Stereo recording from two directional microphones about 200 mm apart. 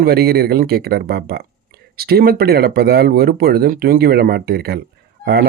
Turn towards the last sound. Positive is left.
turn(degrees=-50)  # may be behind; listen again after turning